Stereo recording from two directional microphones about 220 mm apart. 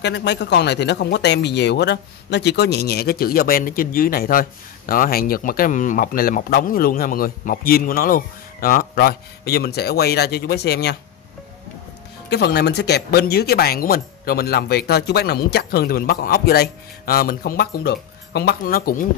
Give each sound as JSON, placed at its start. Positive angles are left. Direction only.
{"t": 0.0, "sound": "speech", "side_deg": 50}
{"t": 12.3, "sound": "speech", "side_deg": 50}